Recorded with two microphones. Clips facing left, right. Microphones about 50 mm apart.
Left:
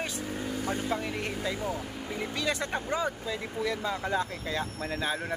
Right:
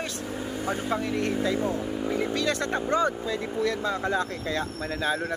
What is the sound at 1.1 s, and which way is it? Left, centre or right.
Speech, centre.